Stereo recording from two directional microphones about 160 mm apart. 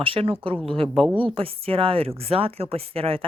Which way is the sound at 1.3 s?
35° right (ahead or behind).